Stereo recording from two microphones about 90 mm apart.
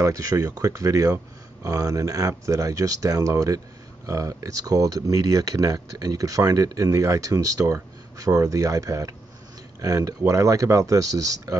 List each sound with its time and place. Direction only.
0.0 s speech: 35° right (ahead or behind)